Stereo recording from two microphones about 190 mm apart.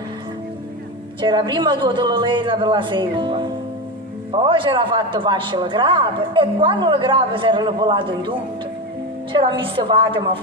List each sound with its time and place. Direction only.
1.2 s speech: 25° right (ahead or behind)